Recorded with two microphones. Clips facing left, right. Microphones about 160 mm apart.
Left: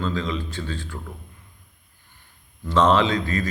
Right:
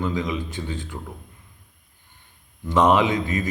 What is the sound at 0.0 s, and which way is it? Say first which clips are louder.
Speech: right 1 dB; 15° right (ahead or behind).